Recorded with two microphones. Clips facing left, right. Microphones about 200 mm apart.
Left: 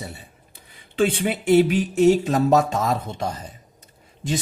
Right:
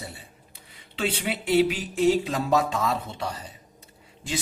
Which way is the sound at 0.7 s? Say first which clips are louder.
Left 8 dB; 50° left (ahead or behind).